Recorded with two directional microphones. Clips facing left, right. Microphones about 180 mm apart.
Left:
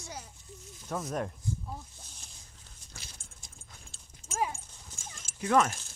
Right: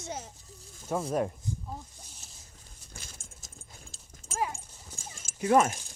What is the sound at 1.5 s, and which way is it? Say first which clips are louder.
Snake: left 1 dB; 15° right (ahead or behind).